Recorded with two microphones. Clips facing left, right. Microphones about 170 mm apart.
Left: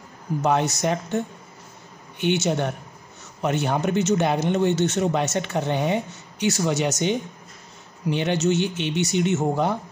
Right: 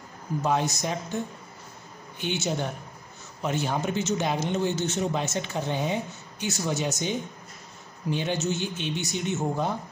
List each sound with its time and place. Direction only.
0.4 s a man's voice: 70° left (ahead or behind)
6.4 s a man's voice: 85° left